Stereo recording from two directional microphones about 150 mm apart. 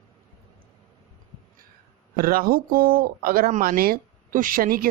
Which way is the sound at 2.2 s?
75° right (ahead or behind).